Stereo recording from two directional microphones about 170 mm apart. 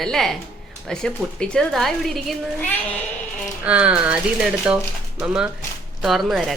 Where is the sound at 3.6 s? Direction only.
5° right (ahead or behind).